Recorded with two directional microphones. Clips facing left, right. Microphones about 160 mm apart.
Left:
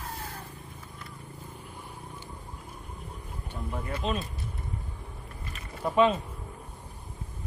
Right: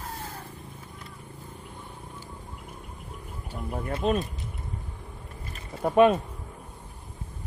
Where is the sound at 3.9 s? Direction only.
55° right (ahead or behind).